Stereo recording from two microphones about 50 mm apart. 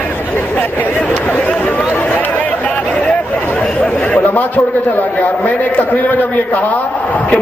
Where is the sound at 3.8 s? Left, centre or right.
Left.